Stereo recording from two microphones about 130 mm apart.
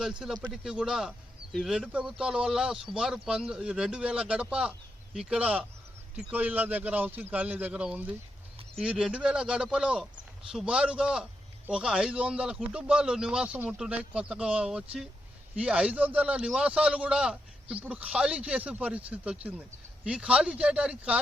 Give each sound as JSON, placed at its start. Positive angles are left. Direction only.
{"t": 0.0, "sound": "a man's voice", "side_deg": -5}